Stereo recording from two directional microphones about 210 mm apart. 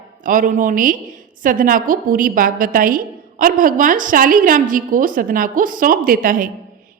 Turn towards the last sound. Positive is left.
turn(degrees=-40)  # may be behind; listen again after turning